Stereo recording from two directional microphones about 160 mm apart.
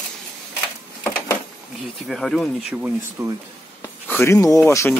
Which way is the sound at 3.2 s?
20° right (ahead or behind).